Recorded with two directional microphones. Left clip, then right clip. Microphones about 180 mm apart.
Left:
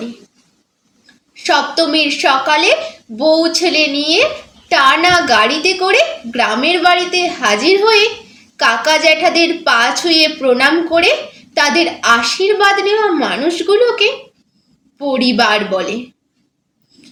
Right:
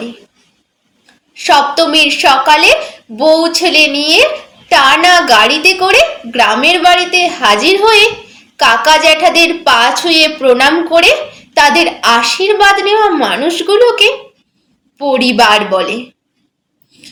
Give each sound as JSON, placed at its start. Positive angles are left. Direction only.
{"t": 1.3, "sound": "a woman's voice", "side_deg": 15}